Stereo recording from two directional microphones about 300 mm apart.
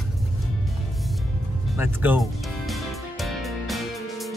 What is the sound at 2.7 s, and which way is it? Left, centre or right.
Music, centre.